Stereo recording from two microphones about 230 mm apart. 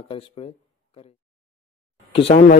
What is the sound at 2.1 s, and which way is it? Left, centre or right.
Speech, left.